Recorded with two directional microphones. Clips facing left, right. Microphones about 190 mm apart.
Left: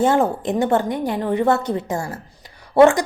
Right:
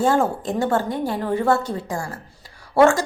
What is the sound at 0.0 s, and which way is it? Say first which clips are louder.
A woman's voice: left 2 dB; 20° left (ahead or behind).